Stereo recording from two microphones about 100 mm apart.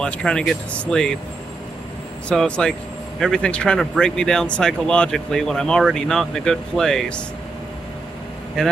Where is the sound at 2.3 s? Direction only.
10° left (ahead or behind).